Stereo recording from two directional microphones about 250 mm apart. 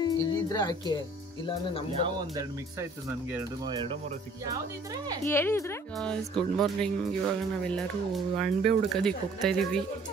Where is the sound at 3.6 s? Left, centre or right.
Centre.